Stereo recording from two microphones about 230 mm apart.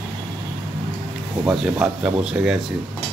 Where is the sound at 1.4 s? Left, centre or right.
Centre.